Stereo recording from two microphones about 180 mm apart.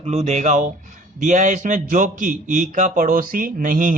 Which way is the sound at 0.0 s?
35° right (ahead or behind).